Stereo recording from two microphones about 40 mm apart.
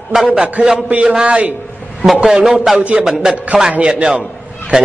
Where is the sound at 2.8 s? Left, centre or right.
Right.